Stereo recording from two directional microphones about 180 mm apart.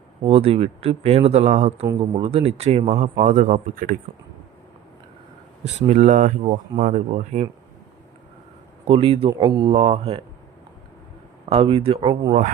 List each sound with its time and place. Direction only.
0.3 s speech: 35° right (ahead or behind)
5.6 s speech: 40° right (ahead or behind)
8.8 s speech: 30° right (ahead or behind)
11.4 s speech: 35° right (ahead or behind)